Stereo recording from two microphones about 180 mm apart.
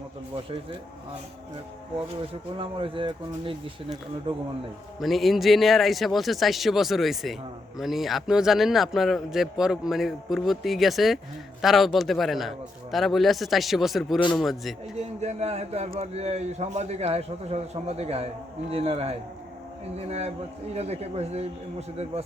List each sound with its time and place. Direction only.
2.6 s speech: 30° right (ahead or behind)
4.9 s a man's voice: centre (ahead or behind)
14.9 s a man's voice: 40° right (ahead or behind)